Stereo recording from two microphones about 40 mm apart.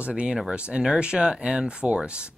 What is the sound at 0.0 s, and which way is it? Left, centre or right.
Speech, right.